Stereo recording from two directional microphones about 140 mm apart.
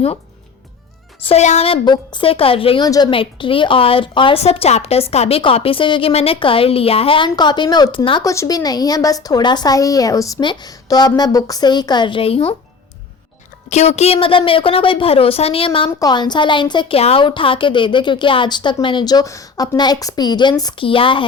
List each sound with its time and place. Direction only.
1.2 s a woman's voice: 50° left (ahead or behind)
2.8 s a woman's voice: 30° left (ahead or behind)
8.2 s a woman's voice: 25° left (ahead or behind); by 12.5 s 45° left (ahead or behind)
13.7 s a woman's voice: 50° left (ahead or behind)
16.0 s a woman's voice: 30° left (ahead or behind)